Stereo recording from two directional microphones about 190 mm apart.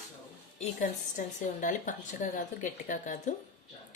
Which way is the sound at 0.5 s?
40° left (ahead or behind).